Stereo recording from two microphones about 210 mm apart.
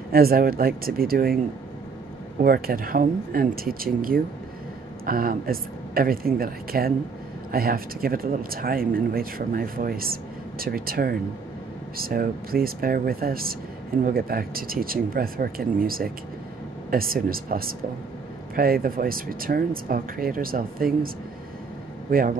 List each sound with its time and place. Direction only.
0.1 s speech: 45° right (ahead or behind)
2.4 s speech: 45° right (ahead or behind)
22.1 s speech: 45° right (ahead or behind)